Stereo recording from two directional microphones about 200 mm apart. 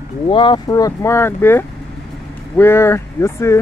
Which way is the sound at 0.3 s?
25° left (ahead or behind).